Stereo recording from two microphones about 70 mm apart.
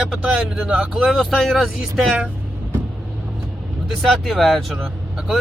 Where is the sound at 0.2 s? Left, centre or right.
Right.